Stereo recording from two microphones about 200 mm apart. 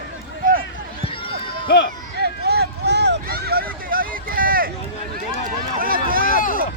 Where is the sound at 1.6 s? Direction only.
55° left (ahead or behind).